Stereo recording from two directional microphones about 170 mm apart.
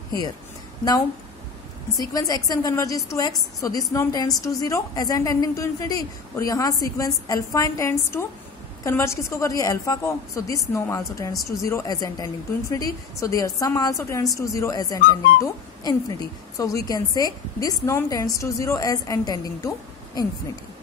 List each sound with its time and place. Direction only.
2.0 s a woman's voice: 20° left (ahead or behind)